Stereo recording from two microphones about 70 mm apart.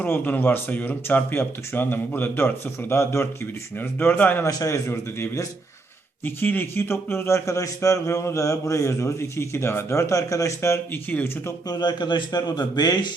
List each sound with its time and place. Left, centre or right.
0.0 s speech: left
2.9 s speech: left
3.8 s speech: left
4.4 s a man's voice: left
4.9 s a man's voice: left
10.9 s speech: left
11.7 s a man's voice: left